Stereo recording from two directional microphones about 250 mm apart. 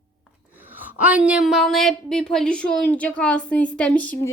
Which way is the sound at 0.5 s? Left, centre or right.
Centre.